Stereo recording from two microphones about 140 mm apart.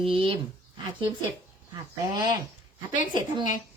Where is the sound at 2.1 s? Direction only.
30° right (ahead or behind).